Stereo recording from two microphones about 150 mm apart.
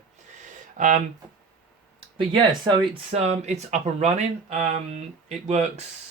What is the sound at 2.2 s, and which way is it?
Speech, 30° right (ahead or behind).